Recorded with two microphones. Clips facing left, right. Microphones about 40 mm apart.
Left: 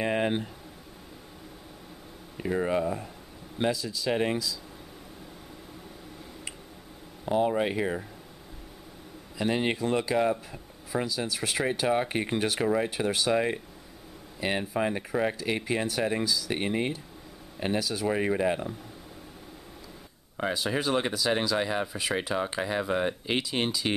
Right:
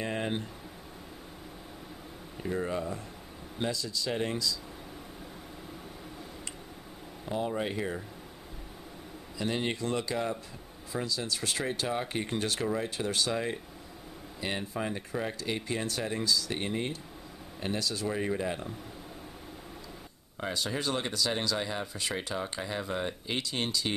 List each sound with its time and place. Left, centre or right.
0.0 s a sound: left
2.3 s speech: centre
7.2 s speech: left
9.4 s speech: centre
16.5 s speech: left
20.3 s speech: centre